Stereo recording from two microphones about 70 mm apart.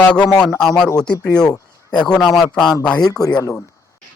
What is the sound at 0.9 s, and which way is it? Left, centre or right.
A man's voice, centre.